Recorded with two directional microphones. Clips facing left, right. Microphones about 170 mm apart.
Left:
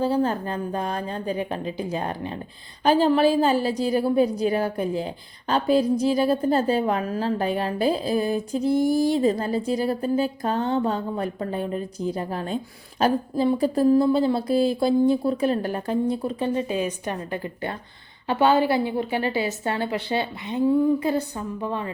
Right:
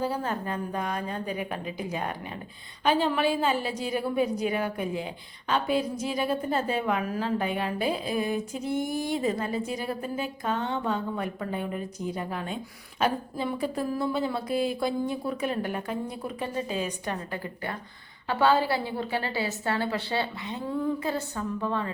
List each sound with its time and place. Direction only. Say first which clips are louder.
0.0 s a woman's voice: left 7 dB; 30° left (ahead or behind)